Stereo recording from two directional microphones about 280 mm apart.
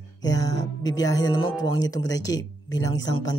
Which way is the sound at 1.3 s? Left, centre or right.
Left.